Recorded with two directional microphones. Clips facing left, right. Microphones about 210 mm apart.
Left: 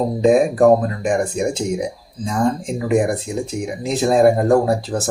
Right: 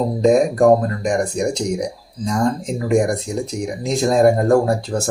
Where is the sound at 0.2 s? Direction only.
5° left (ahead or behind).